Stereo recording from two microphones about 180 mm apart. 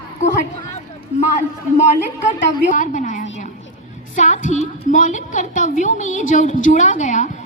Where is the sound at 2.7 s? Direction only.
45° left (ahead or behind).